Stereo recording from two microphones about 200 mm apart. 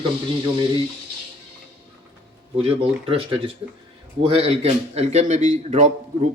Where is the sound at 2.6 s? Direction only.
30° right (ahead or behind).